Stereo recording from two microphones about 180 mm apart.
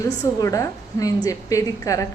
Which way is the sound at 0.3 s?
20° left (ahead or behind).